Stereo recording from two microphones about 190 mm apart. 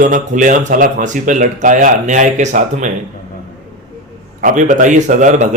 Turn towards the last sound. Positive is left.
turn(degrees=-40)  # may be behind; listen again after turning